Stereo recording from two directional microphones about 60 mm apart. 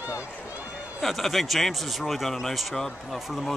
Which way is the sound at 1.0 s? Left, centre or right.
Centre.